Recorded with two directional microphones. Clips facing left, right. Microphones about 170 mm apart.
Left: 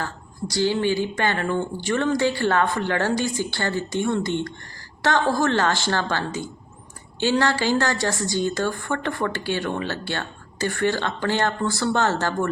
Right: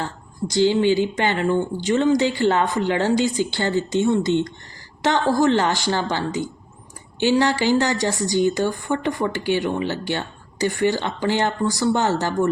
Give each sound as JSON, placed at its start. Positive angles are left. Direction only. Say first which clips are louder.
{"t": 0.0, "sound": "a woman's voice", "louder": "right 3 dB", "side_deg": -20}